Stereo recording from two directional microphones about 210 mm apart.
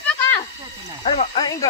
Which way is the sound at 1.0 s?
25° left (ahead or behind).